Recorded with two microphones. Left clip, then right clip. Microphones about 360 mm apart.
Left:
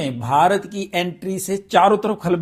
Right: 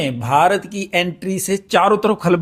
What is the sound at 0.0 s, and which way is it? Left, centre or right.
Speech, centre.